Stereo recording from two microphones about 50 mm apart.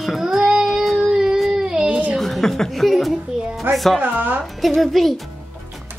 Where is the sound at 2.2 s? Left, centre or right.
Centre.